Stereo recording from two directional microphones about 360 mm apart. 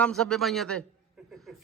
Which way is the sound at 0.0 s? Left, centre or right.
Centre.